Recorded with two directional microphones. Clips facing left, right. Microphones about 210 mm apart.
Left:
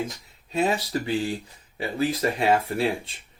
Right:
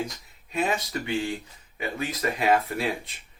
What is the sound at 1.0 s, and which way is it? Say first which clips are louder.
Speech: left 2 dB; 35° left (ahead or behind).